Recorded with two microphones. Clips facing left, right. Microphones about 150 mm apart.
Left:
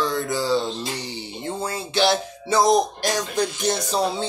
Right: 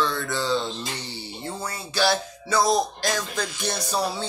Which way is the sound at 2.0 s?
20° left (ahead or behind).